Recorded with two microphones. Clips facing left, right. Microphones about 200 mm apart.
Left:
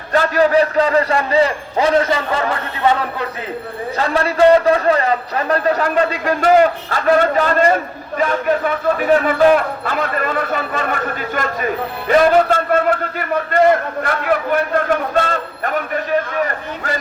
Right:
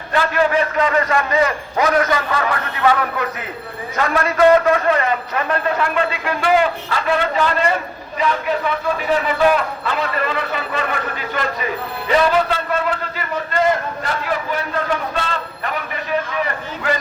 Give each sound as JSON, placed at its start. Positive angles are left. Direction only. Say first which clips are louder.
{"t": 0.1, "sound": "a man's voice", "louder": "left 4 dB", "side_deg": 40}